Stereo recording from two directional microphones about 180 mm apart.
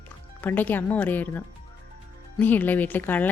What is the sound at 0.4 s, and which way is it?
Speech, 10° left (ahead or behind).